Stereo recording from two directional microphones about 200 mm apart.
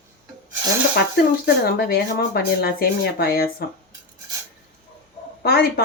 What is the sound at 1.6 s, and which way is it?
Speech, 50° left (ahead or behind).